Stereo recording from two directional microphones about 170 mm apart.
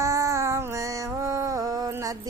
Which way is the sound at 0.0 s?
20° right (ahead or behind).